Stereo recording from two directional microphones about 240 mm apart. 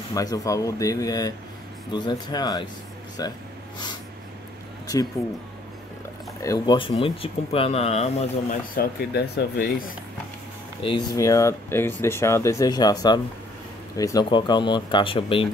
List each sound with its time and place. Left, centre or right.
0.1 s speech: centre
6.4 s speech: centre; by 9.9 s left
10.8 s speech: centre